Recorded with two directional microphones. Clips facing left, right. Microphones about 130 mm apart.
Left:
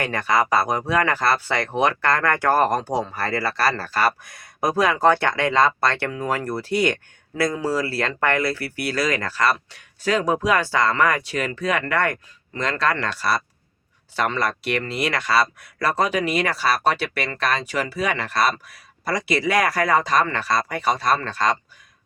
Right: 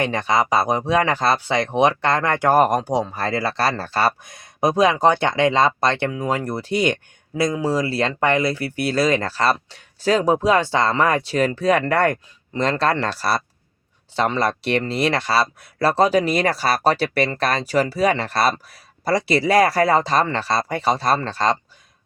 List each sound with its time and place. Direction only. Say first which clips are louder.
0.0 s speech: right 2 dB; 20° right (ahead or behind)